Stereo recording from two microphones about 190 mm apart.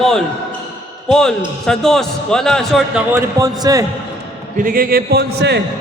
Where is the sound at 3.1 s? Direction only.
20° right (ahead or behind).